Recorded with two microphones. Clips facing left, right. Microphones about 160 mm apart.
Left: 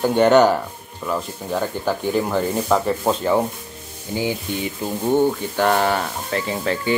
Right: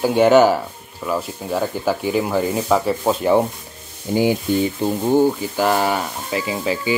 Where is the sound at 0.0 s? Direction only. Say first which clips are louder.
Right 1 dB; 5° right (ahead or behind).